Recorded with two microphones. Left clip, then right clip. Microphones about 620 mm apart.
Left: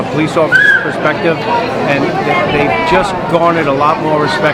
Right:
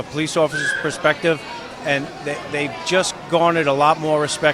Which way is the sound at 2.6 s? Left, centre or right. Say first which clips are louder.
Left 9 dB; right.